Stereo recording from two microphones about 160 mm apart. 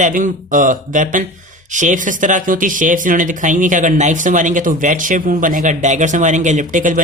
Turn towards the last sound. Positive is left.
turn(degrees=-55)  # may be behind; listen again after turning